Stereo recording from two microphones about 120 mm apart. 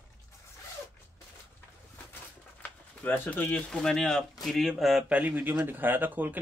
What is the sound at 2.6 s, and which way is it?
Speech, 15° left (ahead or behind).